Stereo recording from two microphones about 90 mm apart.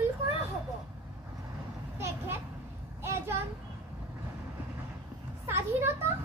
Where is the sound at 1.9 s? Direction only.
25° right (ahead or behind).